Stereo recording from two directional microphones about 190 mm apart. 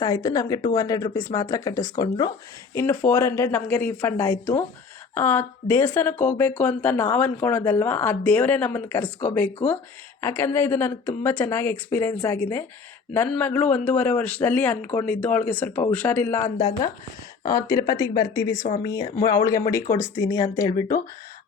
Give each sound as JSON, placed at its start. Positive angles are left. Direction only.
{"t": 0.0, "sound": "speech", "side_deg": 20}
{"t": 2.7, "sound": "speech", "side_deg": 10}
{"t": 16.6, "sound": "speech", "side_deg": 25}